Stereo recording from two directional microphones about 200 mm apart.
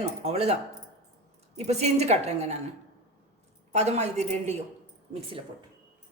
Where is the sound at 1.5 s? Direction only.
30° right (ahead or behind).